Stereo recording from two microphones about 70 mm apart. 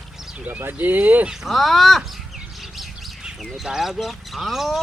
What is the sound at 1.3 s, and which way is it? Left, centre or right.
Speech, centre.